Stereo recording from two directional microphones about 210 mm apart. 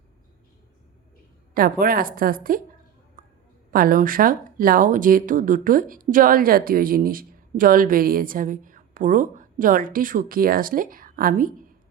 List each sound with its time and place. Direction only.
1.5 s a woman's voice: 45° right (ahead or behind)
3.7 s speech: 45° right (ahead or behind)